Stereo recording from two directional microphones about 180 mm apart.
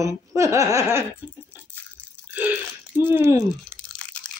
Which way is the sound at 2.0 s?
10° left (ahead or behind).